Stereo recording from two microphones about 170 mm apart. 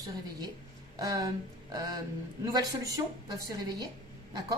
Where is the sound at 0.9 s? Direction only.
20° right (ahead or behind).